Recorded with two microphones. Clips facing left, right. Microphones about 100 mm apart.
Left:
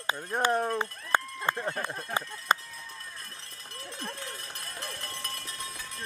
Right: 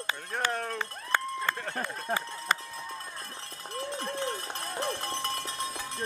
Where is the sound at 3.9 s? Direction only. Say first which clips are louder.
Right 5 dB; 25° right (ahead or behind).